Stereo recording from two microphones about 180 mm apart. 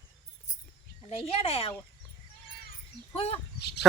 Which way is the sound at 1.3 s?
35° left (ahead or behind).